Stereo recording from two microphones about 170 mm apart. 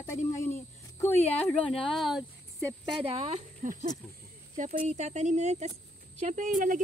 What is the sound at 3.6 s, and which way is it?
Speech, 50° right (ahead or behind).